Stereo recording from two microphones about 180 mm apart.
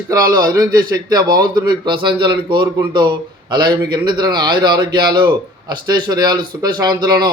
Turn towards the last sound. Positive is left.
turn(degrees=-20)  # may be behind; listen again after turning